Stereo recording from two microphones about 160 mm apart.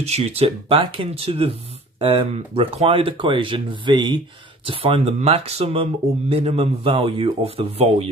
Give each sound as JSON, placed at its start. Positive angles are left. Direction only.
{"t": 0.0, "sound": "speech", "side_deg": -40}